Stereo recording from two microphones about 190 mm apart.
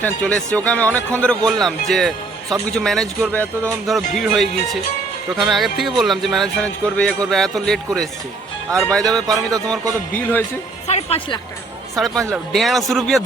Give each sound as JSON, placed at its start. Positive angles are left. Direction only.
{"t": 0.0, "sound": "speech", "side_deg": 5}
{"t": 9.2, "sound": "speech", "side_deg": -20}
{"t": 10.1, "sound": "a man's voice", "side_deg": 10}
{"t": 10.8, "sound": "speech", "side_deg": 35}
{"t": 11.9, "sound": "speech", "side_deg": 0}